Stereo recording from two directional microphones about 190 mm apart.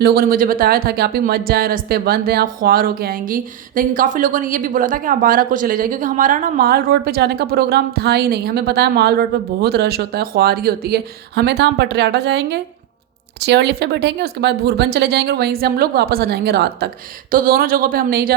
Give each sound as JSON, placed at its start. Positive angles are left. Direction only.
{"t": 0.0, "sound": "a woman's voice", "side_deg": -50}